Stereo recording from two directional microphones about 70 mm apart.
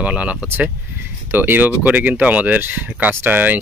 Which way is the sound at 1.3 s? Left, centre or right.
Right.